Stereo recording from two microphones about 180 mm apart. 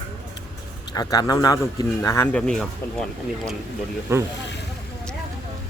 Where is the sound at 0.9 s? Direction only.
20° left (ahead or behind); by 3.0 s 5° left (ahead or behind).